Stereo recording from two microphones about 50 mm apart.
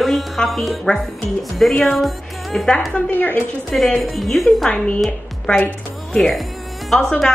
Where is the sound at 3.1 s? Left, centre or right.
Left.